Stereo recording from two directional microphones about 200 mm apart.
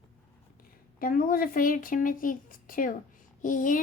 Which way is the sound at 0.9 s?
45° left (ahead or behind).